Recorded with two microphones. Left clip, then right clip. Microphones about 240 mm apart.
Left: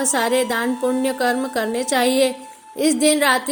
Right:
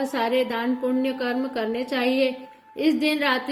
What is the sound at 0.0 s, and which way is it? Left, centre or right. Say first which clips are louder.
A woman's voice: left 4 dB; left.